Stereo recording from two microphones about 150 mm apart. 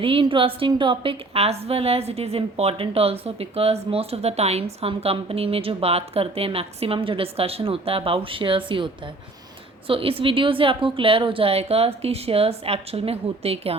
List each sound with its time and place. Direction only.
0.0 s a woman's voice: 35° right (ahead or behind)